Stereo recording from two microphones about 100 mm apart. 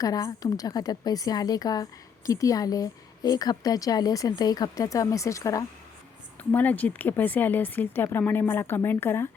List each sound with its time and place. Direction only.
0.0 s a woman's voice: 35° left (ahead or behind)
6.5 s speech: 15° left (ahead or behind)